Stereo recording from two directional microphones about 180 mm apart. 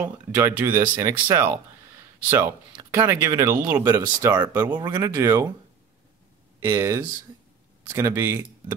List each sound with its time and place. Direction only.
0.0 s speech: 10° right (ahead or behind)
6.6 s speech: 15° right (ahead or behind)